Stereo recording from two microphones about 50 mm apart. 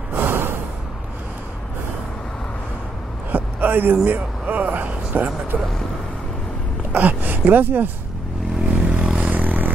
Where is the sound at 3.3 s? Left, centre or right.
Right.